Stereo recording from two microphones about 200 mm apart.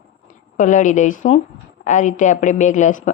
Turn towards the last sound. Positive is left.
turn(degrees=40)  # may be behind; listen again after turning